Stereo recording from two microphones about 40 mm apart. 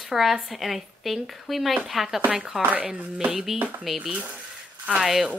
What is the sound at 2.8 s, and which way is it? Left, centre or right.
Music, right.